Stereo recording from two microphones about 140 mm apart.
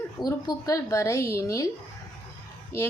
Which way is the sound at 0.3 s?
25° left (ahead or behind).